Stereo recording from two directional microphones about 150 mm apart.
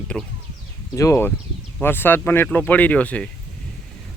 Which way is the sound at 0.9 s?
20° left (ahead or behind).